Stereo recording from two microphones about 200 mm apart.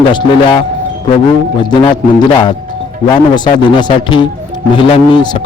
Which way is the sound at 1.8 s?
20° left (ahead or behind).